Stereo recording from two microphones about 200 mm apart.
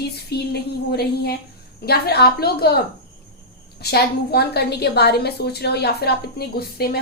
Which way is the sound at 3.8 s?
55° left (ahead or behind).